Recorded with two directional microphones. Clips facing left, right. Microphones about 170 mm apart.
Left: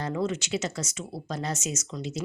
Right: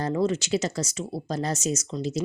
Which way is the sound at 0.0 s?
35° right (ahead or behind).